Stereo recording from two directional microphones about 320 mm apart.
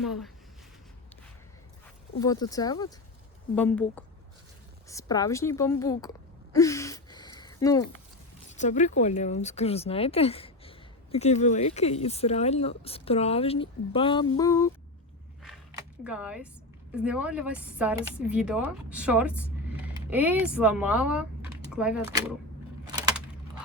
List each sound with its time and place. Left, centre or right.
0.0 s speech: centre
2.1 s a woman's voice: centre
6.5 s gasp: centre
8.4 s a woman's voice: left
16.0 s speech: centre
22.9 s keys jangling: centre